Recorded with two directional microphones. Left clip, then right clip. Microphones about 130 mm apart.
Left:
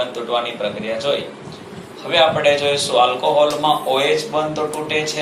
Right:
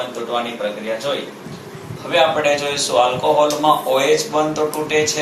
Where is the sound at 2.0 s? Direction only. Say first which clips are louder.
Left 1 dB; 45° left (ahead or behind).